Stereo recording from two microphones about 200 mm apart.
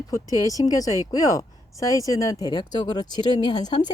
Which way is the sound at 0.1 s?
15° left (ahead or behind).